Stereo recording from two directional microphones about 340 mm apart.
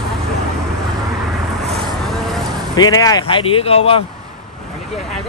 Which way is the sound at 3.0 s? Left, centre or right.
Centre.